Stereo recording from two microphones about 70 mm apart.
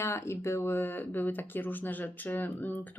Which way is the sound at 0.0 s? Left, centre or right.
Left.